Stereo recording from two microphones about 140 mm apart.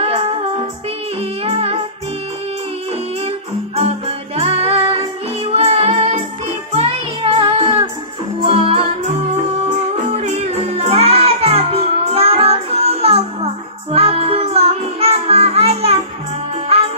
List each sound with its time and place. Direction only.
0.0 s music: 45° right (ahead or behind)
1.4 s music: 45° right (ahead or behind)
3.3 s music: 45° right (ahead or behind)
10.0 s music: 50° right (ahead or behind)